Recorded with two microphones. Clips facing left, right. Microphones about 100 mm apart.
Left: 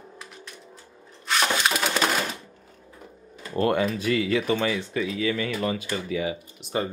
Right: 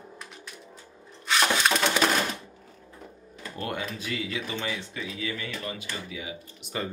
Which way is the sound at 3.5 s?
65° left (ahead or behind).